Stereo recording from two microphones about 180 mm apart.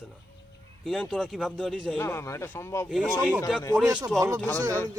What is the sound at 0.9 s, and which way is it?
Speech, centre (ahead or behind).